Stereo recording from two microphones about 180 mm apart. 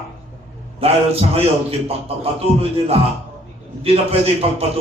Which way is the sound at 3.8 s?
35° right (ahead or behind).